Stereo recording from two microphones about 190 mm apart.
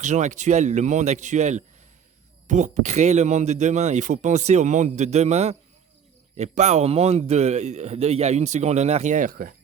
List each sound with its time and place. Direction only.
0.0 s speech: 40° right (ahead or behind)